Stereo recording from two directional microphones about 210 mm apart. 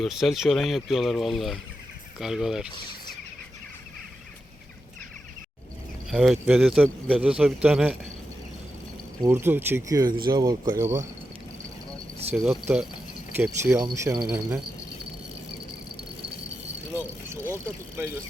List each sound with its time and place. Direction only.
0.0 s speech: centre (ahead or behind)
6.1 s speech: centre (ahead or behind)
9.2 s speech: 10° right (ahead or behind)
12.3 s speech: 5° right (ahead or behind)
17.9 s speech: 10° right (ahead or behind)